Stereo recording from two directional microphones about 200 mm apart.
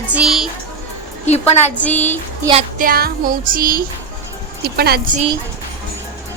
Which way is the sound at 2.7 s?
45° right (ahead or behind).